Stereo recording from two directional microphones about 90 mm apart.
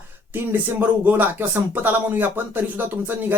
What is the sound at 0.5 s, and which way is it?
Speech, 20° right (ahead or behind).